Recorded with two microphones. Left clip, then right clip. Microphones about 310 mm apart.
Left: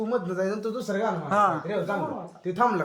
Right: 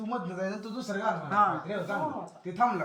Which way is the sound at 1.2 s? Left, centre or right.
Centre.